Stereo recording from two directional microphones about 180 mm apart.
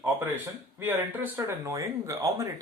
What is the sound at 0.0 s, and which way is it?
Speech, 10° right (ahead or behind).